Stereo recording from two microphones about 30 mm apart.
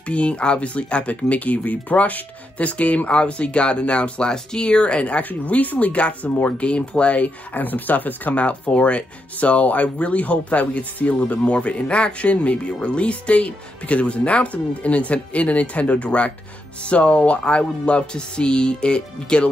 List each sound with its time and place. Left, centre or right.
0.0 s speech: left
0.4 s speech: left
0.7 s speech: left
3.1 s speech: left
4.3 s speech: left
5.3 s speech: left
5.9 s speech: left
6.6 s speech: left
8.4 s speech: left
11.4 s speech: left